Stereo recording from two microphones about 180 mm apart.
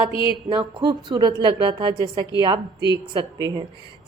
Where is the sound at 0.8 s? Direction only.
25° right (ahead or behind).